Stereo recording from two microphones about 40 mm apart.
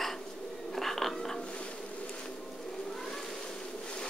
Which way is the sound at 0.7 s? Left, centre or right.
Centre.